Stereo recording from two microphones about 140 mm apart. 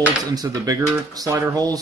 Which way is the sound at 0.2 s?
25° right (ahead or behind).